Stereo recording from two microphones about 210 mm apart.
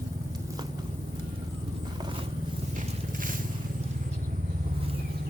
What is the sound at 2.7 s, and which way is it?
Vehicle, 40° right (ahead or behind).